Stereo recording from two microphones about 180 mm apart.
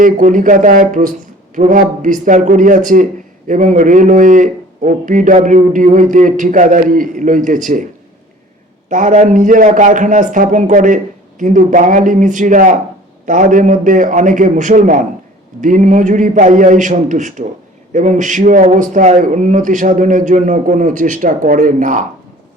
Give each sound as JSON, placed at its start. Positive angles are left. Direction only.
{"t": 0.0, "sound": "speech", "side_deg": -45}
{"t": 8.9, "sound": "speech", "side_deg": -45}